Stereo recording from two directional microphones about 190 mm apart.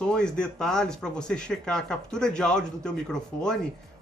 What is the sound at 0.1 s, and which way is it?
Speech, 5° left (ahead or behind).